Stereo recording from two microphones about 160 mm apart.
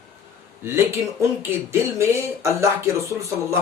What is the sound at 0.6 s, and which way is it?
Speech, 15° right (ahead or behind).